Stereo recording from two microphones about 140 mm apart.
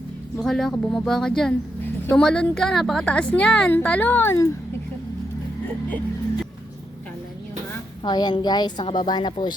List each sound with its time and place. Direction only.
0.4 s a woman's voice: 5° left (ahead or behind)
8.0 s a woman's voice: 30° left (ahead or behind)